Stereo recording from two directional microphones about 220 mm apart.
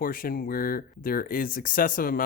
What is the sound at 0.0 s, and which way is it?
Speech, 40° left (ahead or behind).